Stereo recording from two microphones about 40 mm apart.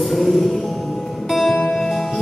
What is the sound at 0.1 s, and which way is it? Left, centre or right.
Music, centre.